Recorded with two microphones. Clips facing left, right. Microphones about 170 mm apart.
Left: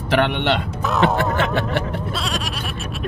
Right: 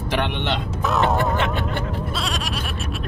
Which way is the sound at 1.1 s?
90° left.